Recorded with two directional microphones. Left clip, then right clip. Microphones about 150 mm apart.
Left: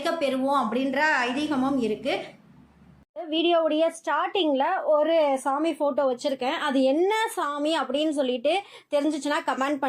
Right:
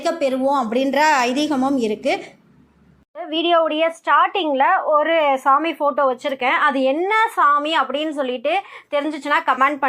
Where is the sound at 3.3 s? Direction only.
10° left (ahead or behind).